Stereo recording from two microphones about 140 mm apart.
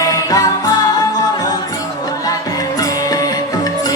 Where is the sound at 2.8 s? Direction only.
25° left (ahead or behind).